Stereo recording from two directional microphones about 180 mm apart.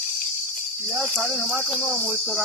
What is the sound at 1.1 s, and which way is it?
Speech, centre (ahead or behind).